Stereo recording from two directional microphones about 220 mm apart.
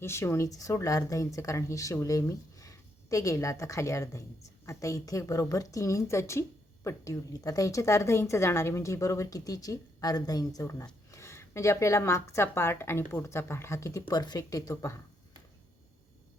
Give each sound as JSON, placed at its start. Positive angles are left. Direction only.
{"t": 0.0, "sound": "a woman's voice", "side_deg": 10}